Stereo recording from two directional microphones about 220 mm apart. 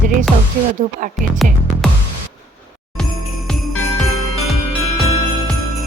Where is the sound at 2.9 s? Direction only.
Centre (ahead or behind).